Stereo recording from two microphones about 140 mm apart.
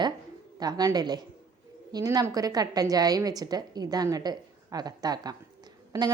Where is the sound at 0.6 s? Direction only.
25° right (ahead or behind).